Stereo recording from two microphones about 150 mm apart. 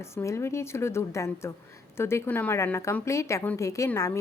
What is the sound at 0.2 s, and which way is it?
A woman's voice, 20° left (ahead or behind).